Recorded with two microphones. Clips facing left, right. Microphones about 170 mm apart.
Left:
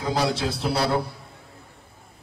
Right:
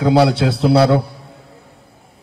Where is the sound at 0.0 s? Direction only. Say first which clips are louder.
Right 11 dB; 70° right (ahead or behind).